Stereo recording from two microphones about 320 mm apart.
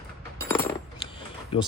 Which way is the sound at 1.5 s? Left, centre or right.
Centre.